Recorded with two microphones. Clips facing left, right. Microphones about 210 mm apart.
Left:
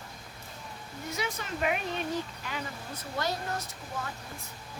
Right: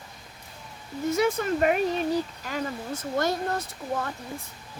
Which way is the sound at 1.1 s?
50° right (ahead or behind).